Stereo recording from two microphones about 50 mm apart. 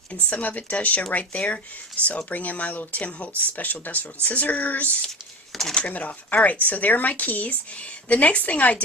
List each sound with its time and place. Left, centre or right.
0.3 s speech: left
5.0 s a sound: centre
5.7 s speech: left